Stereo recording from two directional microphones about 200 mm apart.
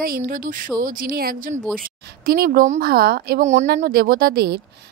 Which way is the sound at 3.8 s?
50° right (ahead or behind).